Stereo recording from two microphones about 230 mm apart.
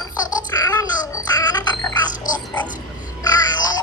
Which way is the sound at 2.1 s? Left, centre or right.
Left.